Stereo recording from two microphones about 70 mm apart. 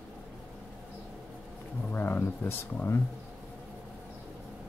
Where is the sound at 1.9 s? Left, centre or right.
Left.